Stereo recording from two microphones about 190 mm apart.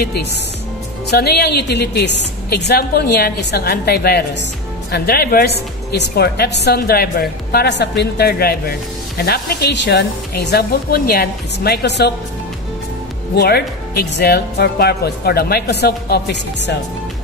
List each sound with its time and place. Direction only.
0.0 s a woman's voice: 55° left (ahead or behind)
13.4 s a woman's voice: 55° left (ahead or behind)